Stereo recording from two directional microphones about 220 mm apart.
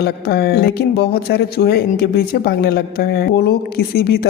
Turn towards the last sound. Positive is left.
turn(degrees=45)  # may be behind; listen again after turning